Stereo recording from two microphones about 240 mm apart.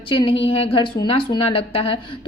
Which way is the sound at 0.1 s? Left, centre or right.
Left.